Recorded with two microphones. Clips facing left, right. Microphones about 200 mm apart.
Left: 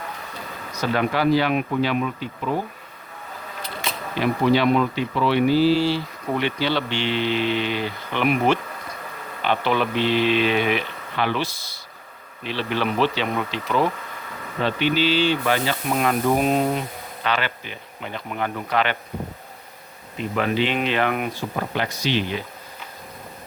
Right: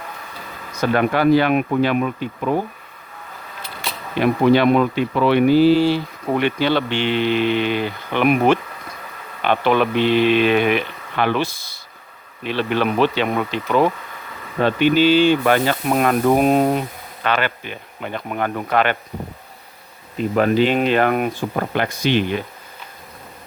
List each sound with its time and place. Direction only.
0.7 s speech: 50° right (ahead or behind)
4.2 s speech: 55° right (ahead or behind)
20.1 s speech: 40° right (ahead or behind)